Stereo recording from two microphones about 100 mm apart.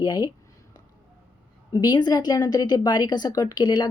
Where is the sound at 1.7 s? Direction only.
45° left (ahead or behind).